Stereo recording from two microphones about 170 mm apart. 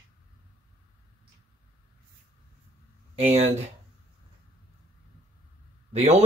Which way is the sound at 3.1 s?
40° right (ahead or behind).